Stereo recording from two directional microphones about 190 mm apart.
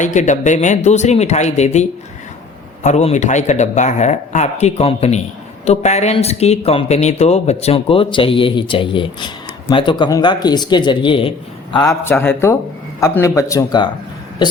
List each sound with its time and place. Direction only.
0.0 s speech: 40° left (ahead or behind); by 13.9 s 20° left (ahead or behind)